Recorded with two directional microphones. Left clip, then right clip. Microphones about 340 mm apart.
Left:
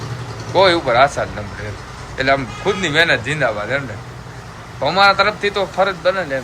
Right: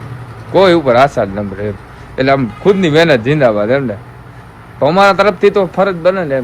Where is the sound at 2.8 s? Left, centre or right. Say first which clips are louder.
Right 3 dB; centre.